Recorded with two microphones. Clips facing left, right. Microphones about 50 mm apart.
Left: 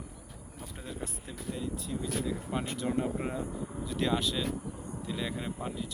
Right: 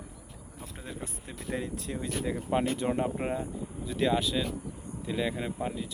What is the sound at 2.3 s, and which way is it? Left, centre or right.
Speech, right.